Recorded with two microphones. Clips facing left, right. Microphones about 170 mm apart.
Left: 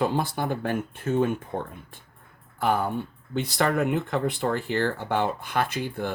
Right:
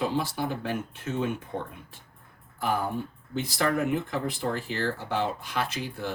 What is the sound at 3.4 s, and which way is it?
Speech, 65° left (ahead or behind).